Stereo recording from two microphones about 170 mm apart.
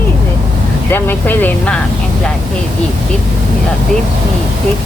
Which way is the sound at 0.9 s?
10° left (ahead or behind).